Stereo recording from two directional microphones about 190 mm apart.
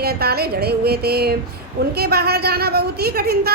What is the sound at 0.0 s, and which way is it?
A woman's voice, 55° right (ahead or behind).